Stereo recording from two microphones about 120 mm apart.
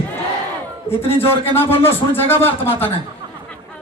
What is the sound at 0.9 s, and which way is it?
Speech, 55° left (ahead or behind).